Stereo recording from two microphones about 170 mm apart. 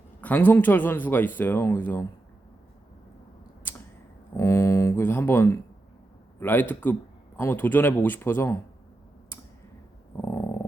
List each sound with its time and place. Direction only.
0.2 s speech: 10° left (ahead or behind)
4.4 s speech: 15° left (ahead or behind)
10.2 s dog: 15° left (ahead or behind)